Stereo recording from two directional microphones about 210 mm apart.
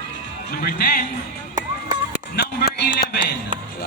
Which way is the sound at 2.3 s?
45° left (ahead or behind).